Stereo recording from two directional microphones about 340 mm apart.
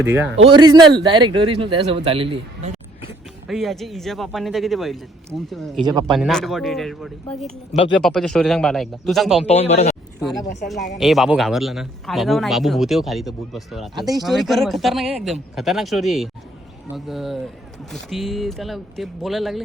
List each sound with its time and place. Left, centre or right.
0.0 s a man's voice: centre
3.4 s a man's voice: centre
5.8 s a man's voice: centre
6.1 s a man's voice: centre
9.4 s speech: centre
10.9 s a man's voice: centre